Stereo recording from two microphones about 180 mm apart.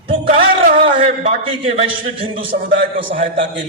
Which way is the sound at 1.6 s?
35° right (ahead or behind).